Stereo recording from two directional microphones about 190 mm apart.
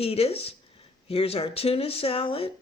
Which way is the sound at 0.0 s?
30° left (ahead or behind).